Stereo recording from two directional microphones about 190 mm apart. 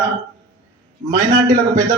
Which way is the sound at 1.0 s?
20° right (ahead or behind).